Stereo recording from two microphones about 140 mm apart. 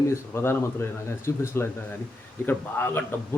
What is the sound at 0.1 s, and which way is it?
A man's voice, 20° left (ahead or behind).